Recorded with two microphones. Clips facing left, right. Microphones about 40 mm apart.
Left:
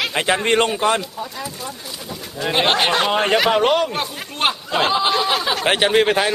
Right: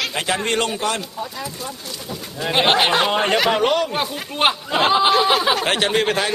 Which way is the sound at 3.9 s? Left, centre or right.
Centre.